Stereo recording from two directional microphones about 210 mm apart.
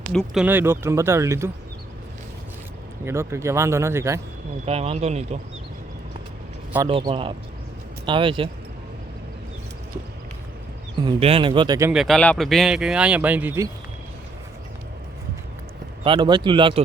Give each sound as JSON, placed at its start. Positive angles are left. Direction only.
{"t": 0.1, "sound": "speech", "side_deg": 0}
{"t": 0.4, "sound": "speech", "side_deg": -10}
{"t": 3.0, "sound": "speech", "side_deg": -10}
{"t": 4.6, "sound": "speech", "side_deg": -30}
{"t": 6.8, "sound": "speech", "side_deg": -25}
{"t": 11.0, "sound": "speech", "side_deg": -25}
{"t": 11.9, "sound": "speech", "side_deg": 0}
{"t": 16.0, "sound": "speech", "side_deg": -20}